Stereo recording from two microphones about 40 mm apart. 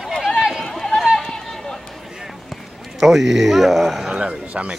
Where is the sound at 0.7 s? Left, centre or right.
Centre.